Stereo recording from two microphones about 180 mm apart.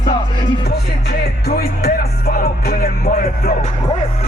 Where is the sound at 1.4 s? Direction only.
55° left (ahead or behind).